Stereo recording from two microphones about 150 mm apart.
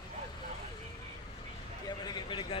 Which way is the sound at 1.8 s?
30° left (ahead or behind).